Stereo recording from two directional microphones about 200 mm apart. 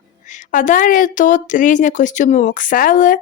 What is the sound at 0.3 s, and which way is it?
A woman's voice, 40° left (ahead or behind).